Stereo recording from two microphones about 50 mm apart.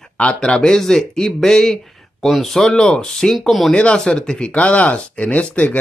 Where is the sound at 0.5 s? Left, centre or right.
Centre.